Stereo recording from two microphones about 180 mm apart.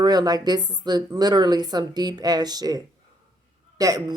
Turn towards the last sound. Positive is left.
turn(degrees=-20)  # may be behind; listen again after turning